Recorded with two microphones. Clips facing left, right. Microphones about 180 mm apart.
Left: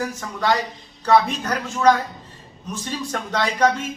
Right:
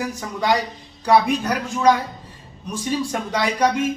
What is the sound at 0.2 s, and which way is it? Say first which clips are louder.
A woman's voice: right 2 dB; 10° right (ahead or behind).